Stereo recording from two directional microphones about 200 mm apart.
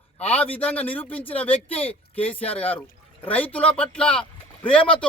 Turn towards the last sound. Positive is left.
turn(degrees=5)  # may be behind; listen again after turning